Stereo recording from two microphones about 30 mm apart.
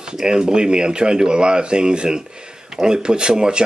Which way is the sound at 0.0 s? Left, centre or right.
Right.